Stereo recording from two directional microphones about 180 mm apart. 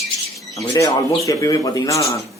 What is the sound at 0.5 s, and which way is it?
Speech, 20° left (ahead or behind).